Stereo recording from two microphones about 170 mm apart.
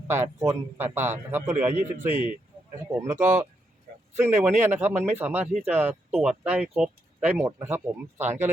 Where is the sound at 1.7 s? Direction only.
45° right (ahead or behind).